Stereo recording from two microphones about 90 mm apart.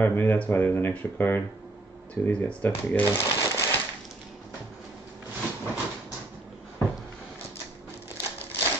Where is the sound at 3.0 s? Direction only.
30° left (ahead or behind).